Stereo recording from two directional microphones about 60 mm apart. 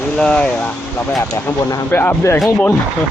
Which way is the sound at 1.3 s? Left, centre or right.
Left.